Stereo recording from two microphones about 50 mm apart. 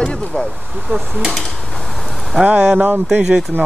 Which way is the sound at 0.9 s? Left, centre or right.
Right.